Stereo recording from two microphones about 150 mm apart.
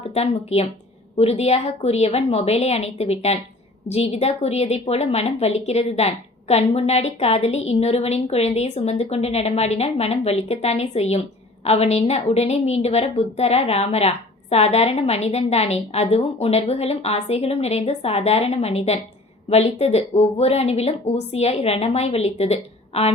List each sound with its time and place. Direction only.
0.1 s a woman's voice: 45° left (ahead or behind)